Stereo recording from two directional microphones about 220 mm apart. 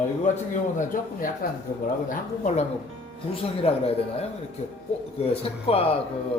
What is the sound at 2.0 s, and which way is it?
Speech, 35° left (ahead or behind).